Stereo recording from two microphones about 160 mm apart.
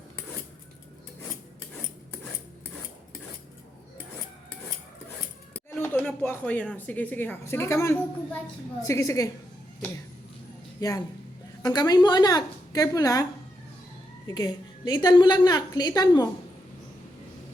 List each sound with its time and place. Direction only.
5.8 s a woman's voice: 10° left (ahead or behind)
10.8 s a woman's voice: 20° left (ahead or behind)
14.3 s a woman's voice: 25° left (ahead or behind)